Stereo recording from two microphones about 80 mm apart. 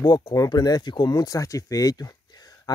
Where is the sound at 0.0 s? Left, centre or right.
Left.